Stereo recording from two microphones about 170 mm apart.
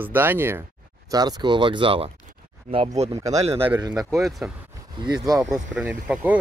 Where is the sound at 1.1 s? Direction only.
25° right (ahead or behind).